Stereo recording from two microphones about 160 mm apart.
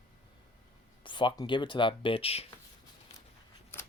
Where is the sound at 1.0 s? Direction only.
30° left (ahead or behind).